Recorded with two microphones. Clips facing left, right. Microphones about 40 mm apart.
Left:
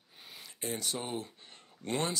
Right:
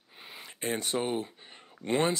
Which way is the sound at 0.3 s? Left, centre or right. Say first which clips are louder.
Right 5 dB; right.